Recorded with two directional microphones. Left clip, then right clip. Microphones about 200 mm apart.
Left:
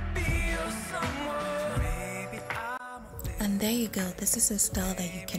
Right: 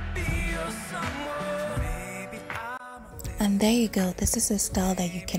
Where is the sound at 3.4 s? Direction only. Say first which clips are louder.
Right 6 dB; 20° right (ahead or behind).